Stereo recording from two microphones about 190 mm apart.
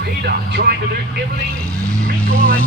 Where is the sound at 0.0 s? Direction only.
60° right (ahead or behind).